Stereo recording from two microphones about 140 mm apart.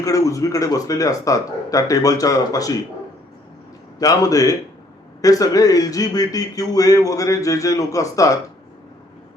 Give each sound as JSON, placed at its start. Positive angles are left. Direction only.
{"t": 0.0, "sound": "speech", "side_deg": 25}
{"t": 4.0, "sound": "speech", "side_deg": 25}